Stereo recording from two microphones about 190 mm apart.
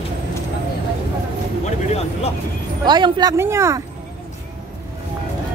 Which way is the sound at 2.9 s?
20° right (ahead or behind).